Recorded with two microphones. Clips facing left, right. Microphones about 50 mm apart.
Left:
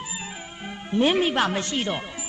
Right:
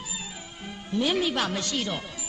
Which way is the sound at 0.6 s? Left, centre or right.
Left.